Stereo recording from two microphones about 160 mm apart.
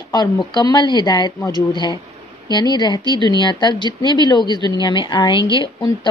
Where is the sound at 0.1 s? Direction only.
25° left (ahead or behind).